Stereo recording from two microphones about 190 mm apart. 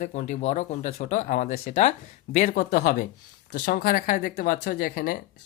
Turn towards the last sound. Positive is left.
turn(degrees=50)  # may be behind; listen again after turning